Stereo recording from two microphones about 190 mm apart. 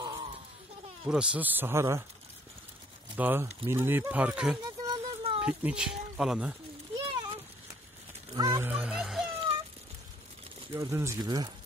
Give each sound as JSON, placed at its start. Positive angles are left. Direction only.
{"t": 0.0, "sound": "a sound", "side_deg": -25}
{"t": 1.0, "sound": "speech", "side_deg": -5}
{"t": 3.2, "sound": "speech", "side_deg": -10}
{"t": 4.8, "sound": "a sound", "side_deg": -30}
{"t": 5.4, "sound": "speech", "side_deg": -5}
{"t": 7.1, "sound": "a sound", "side_deg": -25}
{"t": 8.4, "sound": "speech", "side_deg": -20}
{"t": 8.6, "sound": "music", "side_deg": -5}
{"t": 10.7, "sound": "speech", "side_deg": -15}